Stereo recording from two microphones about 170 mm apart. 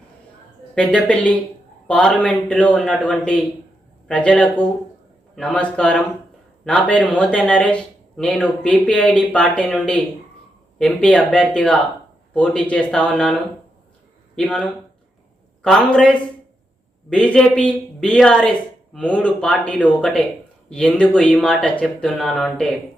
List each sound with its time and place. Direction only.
0.8 s speech: 5° left (ahead or behind)
14.3 s speech: 5° left (ahead or behind)